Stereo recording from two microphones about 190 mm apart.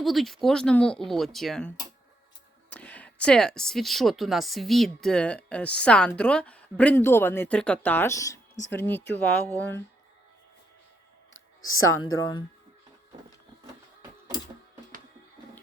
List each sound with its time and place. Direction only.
0.0 s speech: centre (ahead or behind)
11.3 s a sound: 90° left
12.1 s speech: 20° left (ahead or behind)